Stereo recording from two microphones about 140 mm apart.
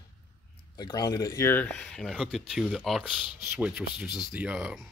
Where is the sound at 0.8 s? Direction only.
25° left (ahead or behind).